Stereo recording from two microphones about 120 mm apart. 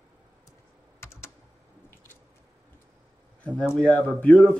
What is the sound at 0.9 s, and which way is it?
Computer keyboard, 20° left (ahead or behind).